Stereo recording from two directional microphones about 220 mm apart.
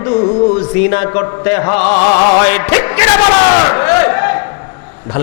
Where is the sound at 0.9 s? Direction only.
20° left (ahead or behind).